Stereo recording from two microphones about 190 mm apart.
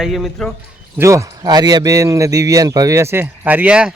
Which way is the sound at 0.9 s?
15° right (ahead or behind).